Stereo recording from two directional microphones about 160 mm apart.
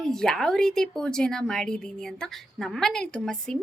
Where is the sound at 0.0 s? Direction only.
5° left (ahead or behind).